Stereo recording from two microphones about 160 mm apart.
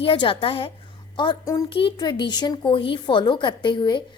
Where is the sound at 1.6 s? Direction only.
30° left (ahead or behind).